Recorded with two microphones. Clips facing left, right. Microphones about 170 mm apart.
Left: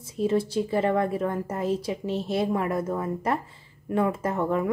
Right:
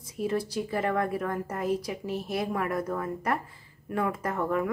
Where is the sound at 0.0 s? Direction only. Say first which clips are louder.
Left 5 dB; 25° left (ahead or behind).